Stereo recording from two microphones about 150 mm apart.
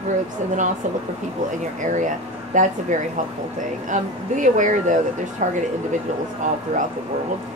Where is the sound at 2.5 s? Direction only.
55° right (ahead or behind).